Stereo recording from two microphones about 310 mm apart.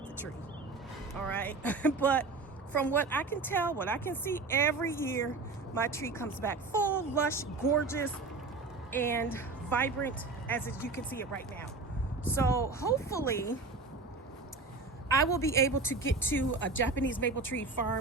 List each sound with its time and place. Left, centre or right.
1.3 s speech: centre
15.1 s speech: centre
16.5 s speech: left